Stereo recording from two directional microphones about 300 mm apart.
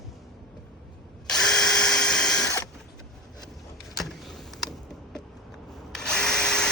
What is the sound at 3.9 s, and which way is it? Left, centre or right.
Vehicle, centre.